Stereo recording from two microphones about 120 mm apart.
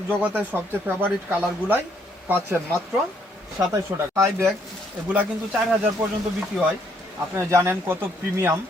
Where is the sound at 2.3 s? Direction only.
20° right (ahead or behind).